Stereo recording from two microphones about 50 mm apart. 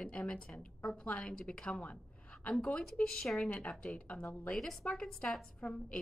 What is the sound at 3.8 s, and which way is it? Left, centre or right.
Speech, left.